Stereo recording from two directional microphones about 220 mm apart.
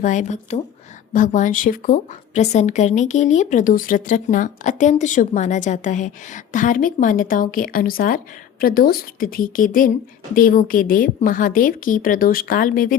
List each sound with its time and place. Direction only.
0.0 s a woman's voice: 35° left (ahead or behind)